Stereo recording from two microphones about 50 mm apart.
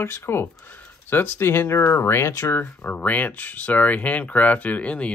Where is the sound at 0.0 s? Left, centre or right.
Left.